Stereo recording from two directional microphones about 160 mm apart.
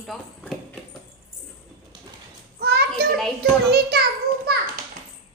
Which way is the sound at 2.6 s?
85° right.